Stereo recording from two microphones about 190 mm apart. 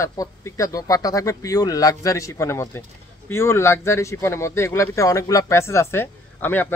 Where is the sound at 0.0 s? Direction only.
20° left (ahead or behind).